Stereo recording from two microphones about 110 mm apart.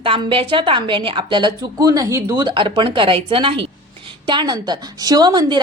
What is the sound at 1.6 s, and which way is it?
Speech, 30° right (ahead or behind).